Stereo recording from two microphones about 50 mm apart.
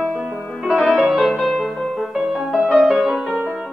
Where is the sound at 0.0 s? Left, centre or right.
Centre.